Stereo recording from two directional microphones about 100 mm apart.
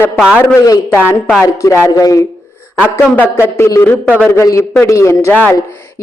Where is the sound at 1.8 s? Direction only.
35° left (ahead or behind).